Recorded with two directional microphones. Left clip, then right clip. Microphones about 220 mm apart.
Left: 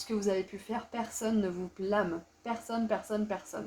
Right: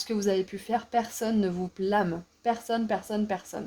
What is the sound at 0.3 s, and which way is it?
Speech, 50° right (ahead or behind).